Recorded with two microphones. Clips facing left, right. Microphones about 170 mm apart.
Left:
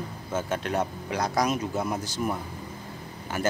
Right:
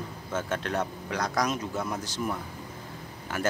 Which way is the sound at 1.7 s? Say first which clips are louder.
Left 3 dB; 15° left (ahead or behind).